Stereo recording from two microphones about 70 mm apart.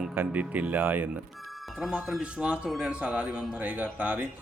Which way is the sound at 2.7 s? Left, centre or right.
Centre.